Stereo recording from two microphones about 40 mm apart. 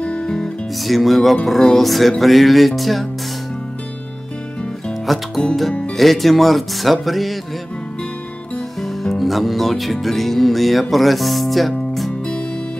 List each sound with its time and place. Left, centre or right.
0.0 s music: left
0.8 s music: centre
5.0 s speech: centre
5.9 s music: centre
8.8 s speech: centre